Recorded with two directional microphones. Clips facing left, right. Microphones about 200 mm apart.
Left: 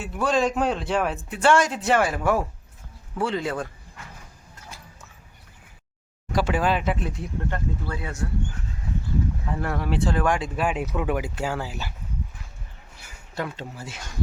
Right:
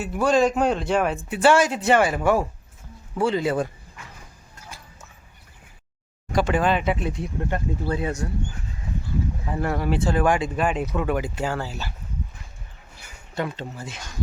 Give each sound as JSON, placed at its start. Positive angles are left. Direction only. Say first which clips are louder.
{"t": 0.0, "sound": "a man's voice", "louder": "right 4 dB", "side_deg": 0}
{"t": 6.3, "sound": "a man's voice", "louder": "right 2 dB", "side_deg": 5}
{"t": 7.4, "sound": "speech", "louder": "right 4 dB", "side_deg": -20}
{"t": 9.5, "sound": "a man's voice", "louder": "right 6 dB", "side_deg": -5}
{"t": 13.3, "sound": "speech", "louder": "right 3 dB", "side_deg": 5}